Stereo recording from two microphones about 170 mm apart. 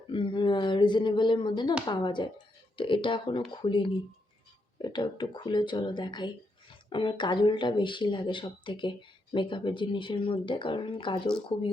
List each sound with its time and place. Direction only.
0.1 s speech: 30° left (ahead or behind)